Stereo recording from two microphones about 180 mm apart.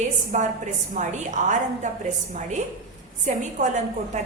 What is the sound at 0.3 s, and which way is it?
A woman's voice, 45° right (ahead or behind).